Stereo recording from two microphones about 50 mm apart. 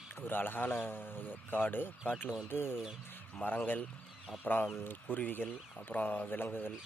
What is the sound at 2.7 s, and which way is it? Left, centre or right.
Speech, centre.